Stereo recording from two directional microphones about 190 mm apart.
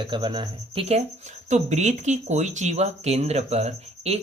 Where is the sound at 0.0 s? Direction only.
25° right (ahead or behind).